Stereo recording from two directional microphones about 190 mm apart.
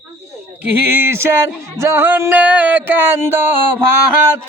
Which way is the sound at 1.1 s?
10° right (ahead or behind).